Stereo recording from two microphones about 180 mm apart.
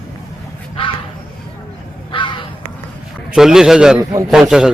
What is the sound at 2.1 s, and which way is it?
Crow, 25° left (ahead or behind).